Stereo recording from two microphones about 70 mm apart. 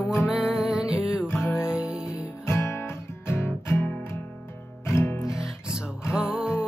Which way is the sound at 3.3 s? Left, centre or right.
Left.